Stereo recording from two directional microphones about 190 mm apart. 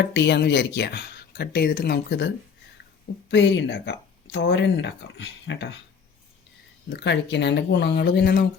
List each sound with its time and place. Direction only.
0.0 s speech: 65° left (ahead or behind)
6.9 s speech: 65° left (ahead or behind)